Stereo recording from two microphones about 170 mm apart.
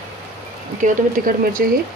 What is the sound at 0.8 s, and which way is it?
Speech, 50° right (ahead or behind).